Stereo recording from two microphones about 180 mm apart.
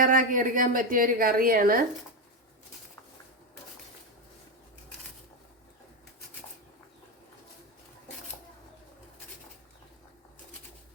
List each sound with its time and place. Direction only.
0.0 s a woman's voice: 50° right (ahead or behind)